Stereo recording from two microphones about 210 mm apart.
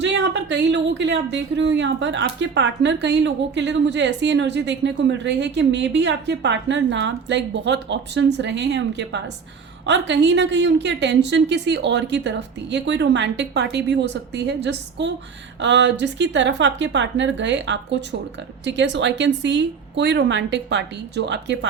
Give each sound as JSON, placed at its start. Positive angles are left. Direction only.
{"t": 0.0, "sound": "speech", "side_deg": -55}